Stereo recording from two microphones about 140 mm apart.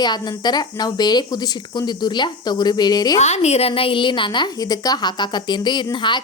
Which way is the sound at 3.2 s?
50° left (ahead or behind).